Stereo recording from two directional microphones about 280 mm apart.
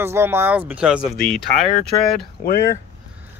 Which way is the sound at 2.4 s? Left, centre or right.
Left.